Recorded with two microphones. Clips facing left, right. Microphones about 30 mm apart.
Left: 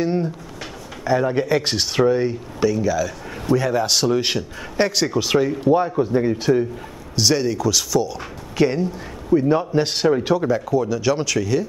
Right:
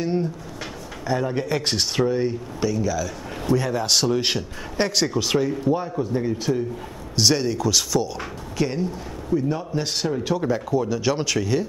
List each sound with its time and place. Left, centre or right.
0.0 s speech: centre
5.7 s a man's voice: left
7.2 s speech: centre
8.5 s speech: centre
9.3 s a man's voice: left
10.3 s speech: centre
10.7 s speech: centre